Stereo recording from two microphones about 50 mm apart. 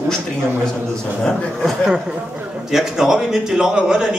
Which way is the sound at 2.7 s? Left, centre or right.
Centre.